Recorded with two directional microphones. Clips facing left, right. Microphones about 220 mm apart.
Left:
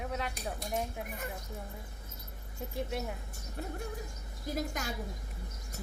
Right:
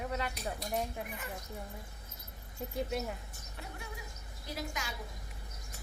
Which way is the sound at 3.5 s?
45° left (ahead or behind).